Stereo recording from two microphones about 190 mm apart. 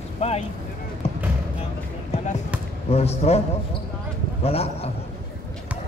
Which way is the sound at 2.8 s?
35° left (ahead or behind).